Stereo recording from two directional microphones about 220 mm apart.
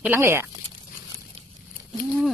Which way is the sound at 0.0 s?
10° right (ahead or behind).